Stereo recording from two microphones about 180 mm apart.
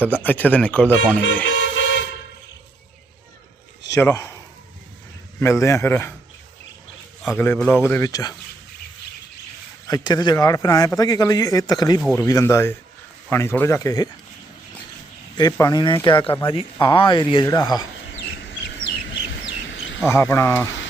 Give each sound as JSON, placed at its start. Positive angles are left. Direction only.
{"t": 0.2, "sound": "a man's voice", "side_deg": 10}
{"t": 1.5, "sound": "vehicle", "side_deg": 90}
{"t": 3.9, "sound": "a man's voice", "side_deg": 15}
{"t": 5.4, "sound": "a man's voice", "side_deg": 15}
{"t": 7.3, "sound": "a man's voice", "side_deg": 10}
{"t": 9.8, "sound": "a man's voice", "side_deg": 20}
{"t": 15.4, "sound": "a man's voice", "side_deg": 20}
{"t": 16.2, "sound": "a man's voice", "side_deg": 10}
{"t": 16.7, "sound": "a man's voice", "side_deg": 30}
{"t": 18.1, "sound": "bird", "side_deg": 85}
{"t": 20.1, "sound": "a man's voice", "side_deg": 15}